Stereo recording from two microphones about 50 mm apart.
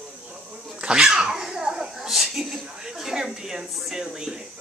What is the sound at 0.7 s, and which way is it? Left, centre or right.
Dog, centre.